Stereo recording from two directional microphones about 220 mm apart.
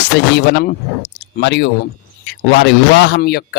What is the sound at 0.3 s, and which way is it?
Speech, 50° left (ahead or behind).